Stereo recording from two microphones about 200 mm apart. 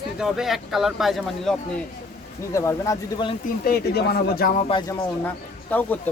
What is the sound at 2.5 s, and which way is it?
Speech, 15° left (ahead or behind).